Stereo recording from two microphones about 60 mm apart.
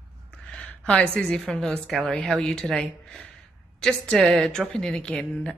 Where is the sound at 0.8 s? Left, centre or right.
Centre.